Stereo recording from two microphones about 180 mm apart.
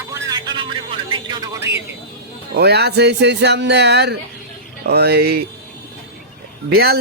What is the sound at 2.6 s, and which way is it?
Speech, 65° right (ahead or behind).